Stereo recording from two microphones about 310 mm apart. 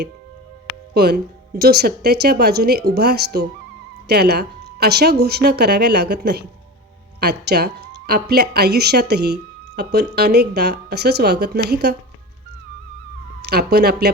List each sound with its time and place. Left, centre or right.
0.9 s speech: right
13.4 s speech: right